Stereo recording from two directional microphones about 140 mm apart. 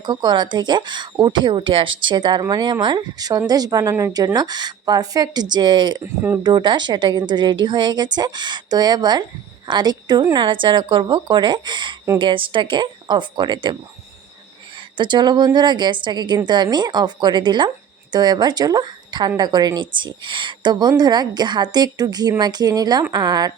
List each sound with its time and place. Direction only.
0.0 s a woman's voice: 30° right (ahead or behind)
14.9 s a woman's voice: 35° right (ahead or behind)